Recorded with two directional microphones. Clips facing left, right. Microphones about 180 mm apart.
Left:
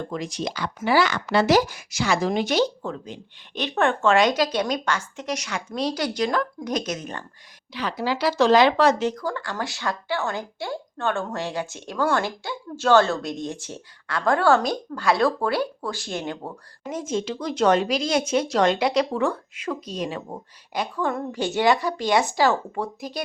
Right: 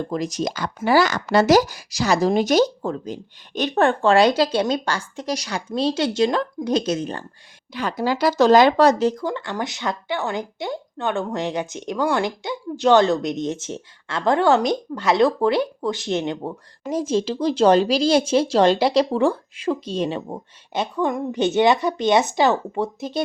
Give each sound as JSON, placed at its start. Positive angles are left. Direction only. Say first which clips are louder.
{"t": 0.1, "sound": "speech", "louder": "right 5 dB", "side_deg": -40}
{"t": 7.7, "sound": "speech", "louder": "right 3 dB", "side_deg": -45}
{"t": 9.2, "sound": "speech", "louder": "right 3 dB", "side_deg": -20}
{"t": 16.9, "sound": "speech", "louder": "right 5 dB", "side_deg": -35}